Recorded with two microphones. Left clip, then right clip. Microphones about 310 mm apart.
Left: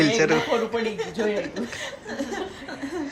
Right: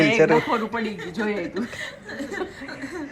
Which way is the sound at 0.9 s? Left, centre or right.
Centre.